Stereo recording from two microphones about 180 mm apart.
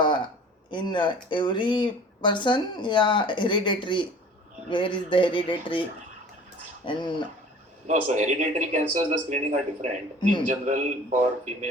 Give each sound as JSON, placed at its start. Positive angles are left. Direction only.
{"t": 0.0, "sound": "a sound", "side_deg": 25}
{"t": 0.7, "sound": "speech", "side_deg": 25}
{"t": 6.8, "sound": "speech", "side_deg": 25}
{"t": 7.9, "sound": "a man's voice", "side_deg": -45}